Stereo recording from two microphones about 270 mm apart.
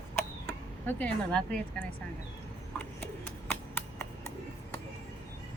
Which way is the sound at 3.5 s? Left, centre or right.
Centre.